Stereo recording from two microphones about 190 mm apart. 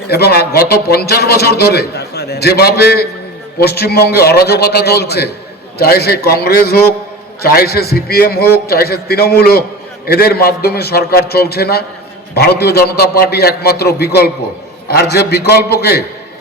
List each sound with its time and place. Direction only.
0.1 s a man's voice: 55° left (ahead or behind)